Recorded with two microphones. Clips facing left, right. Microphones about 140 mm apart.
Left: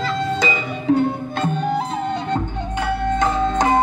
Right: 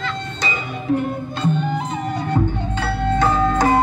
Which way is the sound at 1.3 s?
45° left (ahead or behind).